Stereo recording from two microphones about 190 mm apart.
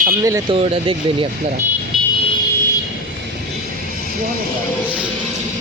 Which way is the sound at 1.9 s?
Centre (ahead or behind).